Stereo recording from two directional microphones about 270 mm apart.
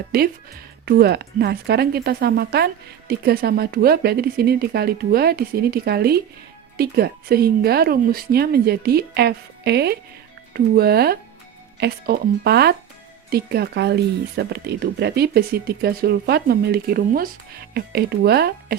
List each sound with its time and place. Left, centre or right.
0.1 s speech: right